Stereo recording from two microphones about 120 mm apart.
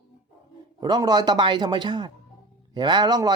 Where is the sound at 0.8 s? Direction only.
35° right (ahead or behind).